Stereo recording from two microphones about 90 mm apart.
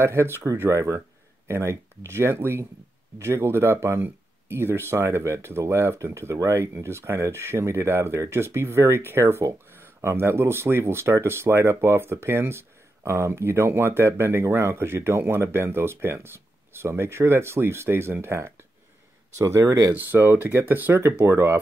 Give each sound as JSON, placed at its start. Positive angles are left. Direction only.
{"t": 0.0, "sound": "speech", "side_deg": -30}
{"t": 19.9, "sound": "speech", "side_deg": -20}